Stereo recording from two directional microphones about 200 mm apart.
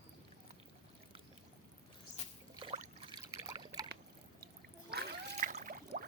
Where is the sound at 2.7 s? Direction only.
40° right (ahead or behind).